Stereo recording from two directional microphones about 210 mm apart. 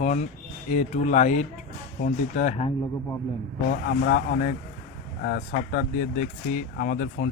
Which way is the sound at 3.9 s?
40° left (ahead or behind).